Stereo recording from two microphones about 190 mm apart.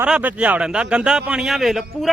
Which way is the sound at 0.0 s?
10° right (ahead or behind).